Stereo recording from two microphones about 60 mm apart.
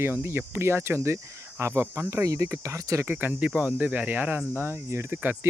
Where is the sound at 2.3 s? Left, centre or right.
Right.